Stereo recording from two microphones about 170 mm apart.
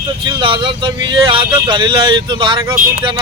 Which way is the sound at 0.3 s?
30° right (ahead or behind).